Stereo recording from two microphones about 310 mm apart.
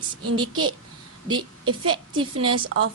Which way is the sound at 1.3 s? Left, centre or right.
Centre.